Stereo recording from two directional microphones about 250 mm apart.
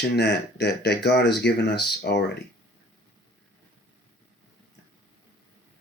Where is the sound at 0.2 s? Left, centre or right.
Left.